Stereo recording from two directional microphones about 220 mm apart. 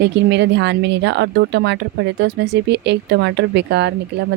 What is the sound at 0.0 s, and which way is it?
Speech, 50° right (ahead or behind).